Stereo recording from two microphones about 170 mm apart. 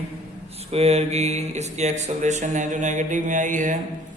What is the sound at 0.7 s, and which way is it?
A man's voice, 40° right (ahead or behind).